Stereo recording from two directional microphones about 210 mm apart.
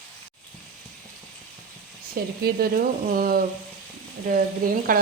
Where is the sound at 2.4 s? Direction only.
45° right (ahead or behind).